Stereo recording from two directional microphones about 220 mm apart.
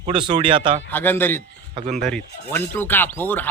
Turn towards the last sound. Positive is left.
turn(degrees=10)  # may be behind; listen again after turning